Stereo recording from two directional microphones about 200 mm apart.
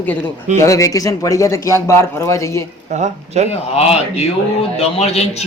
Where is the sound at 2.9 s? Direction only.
35° right (ahead or behind).